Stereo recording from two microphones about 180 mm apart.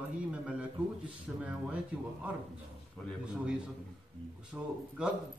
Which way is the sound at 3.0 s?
5° left (ahead or behind).